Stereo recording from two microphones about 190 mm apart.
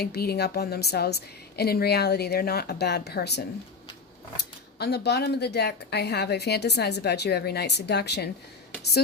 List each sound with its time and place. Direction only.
0.0 s a woman's voice: 55° left (ahead or behind)
4.8 s a woman's voice: 60° left (ahead or behind)